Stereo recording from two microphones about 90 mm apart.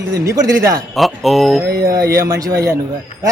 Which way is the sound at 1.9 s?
35° right (ahead or behind).